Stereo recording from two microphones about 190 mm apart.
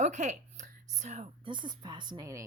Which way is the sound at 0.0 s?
40° right (ahead or behind).